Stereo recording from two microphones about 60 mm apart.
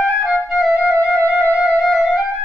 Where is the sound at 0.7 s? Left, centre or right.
Right.